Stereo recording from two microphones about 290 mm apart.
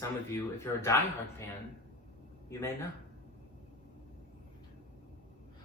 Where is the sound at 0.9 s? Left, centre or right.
Centre.